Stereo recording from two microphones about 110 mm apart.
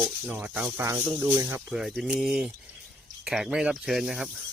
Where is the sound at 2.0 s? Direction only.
5° right (ahead or behind).